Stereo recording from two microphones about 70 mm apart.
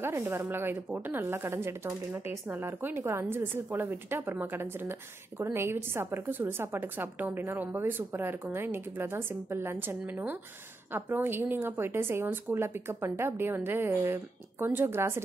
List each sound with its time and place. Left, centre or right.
0.0 s a woman's voice: right